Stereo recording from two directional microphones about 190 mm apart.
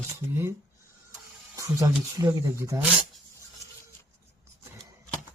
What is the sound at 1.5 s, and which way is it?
Speech, 15° right (ahead or behind).